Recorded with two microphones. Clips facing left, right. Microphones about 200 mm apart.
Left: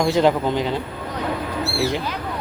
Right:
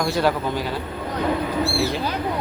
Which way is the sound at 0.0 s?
20° left (ahead or behind).